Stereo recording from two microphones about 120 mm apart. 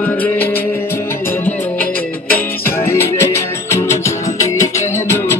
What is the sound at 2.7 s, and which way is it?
Music, 20° left (ahead or behind).